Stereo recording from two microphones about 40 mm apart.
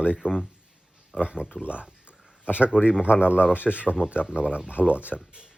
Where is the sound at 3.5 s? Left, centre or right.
Left.